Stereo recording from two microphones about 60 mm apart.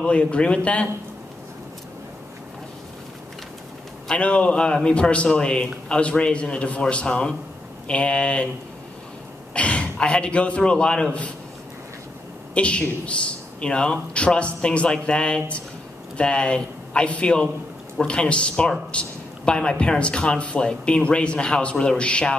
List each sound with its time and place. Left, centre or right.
0.0 s speech: centre
4.1 s speech: centre
9.5 s speech: centre
12.5 s speech: centre